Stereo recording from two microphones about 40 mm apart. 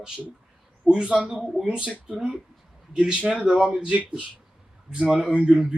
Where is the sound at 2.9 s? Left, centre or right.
Right.